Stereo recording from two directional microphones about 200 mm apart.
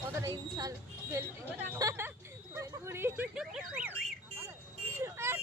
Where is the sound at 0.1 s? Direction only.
15° right (ahead or behind).